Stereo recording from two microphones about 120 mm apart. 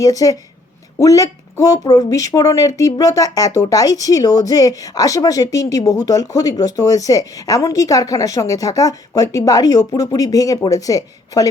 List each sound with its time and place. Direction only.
0.0 s speech: 30° left (ahead or behind)